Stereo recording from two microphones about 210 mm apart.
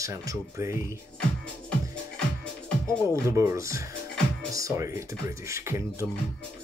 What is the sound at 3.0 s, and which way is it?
Speech, 15° right (ahead or behind).